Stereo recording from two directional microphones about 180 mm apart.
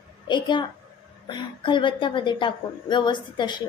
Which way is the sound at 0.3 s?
25° left (ahead or behind).